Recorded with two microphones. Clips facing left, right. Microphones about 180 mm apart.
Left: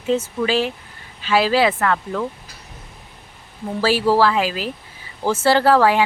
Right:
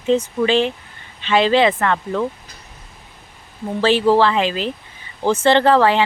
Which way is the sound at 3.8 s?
5° left (ahead or behind).